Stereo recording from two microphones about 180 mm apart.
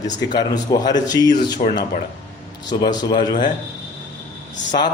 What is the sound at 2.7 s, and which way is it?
Speech, 25° left (ahead or behind).